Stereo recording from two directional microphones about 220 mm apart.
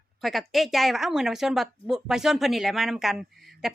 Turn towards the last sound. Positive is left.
turn(degrees=0)  # may be behind; listen again after turning